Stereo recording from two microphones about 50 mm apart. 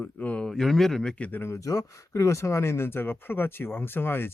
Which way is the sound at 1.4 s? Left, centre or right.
Left.